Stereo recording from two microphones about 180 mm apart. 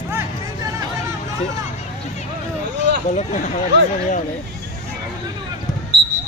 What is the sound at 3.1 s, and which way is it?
Speech, 40° left (ahead or behind).